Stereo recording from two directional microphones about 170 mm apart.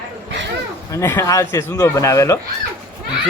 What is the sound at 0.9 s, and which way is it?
Speech, 15° left (ahead or behind).